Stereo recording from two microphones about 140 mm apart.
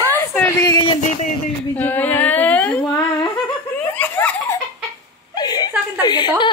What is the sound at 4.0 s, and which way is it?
Laughter, 15° left (ahead or behind).